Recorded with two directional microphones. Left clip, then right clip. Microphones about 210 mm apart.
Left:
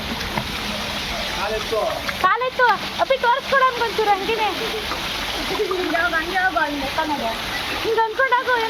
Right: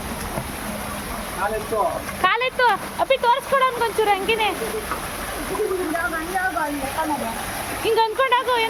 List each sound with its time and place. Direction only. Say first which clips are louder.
2.2 s speech: left 1 dB; 25° right (ahead or behind)
8.2 s speech: left 1 dB; 25° right (ahead or behind)